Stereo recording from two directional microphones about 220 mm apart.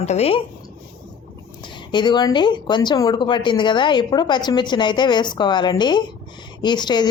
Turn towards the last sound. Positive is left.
turn(degrees=20)  # may be behind; listen again after turning